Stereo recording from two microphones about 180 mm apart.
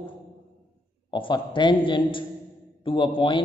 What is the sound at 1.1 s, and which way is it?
A man's voice, 25° left (ahead or behind).